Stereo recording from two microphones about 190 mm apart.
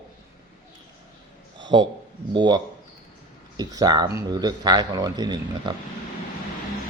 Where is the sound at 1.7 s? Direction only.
25° right (ahead or behind).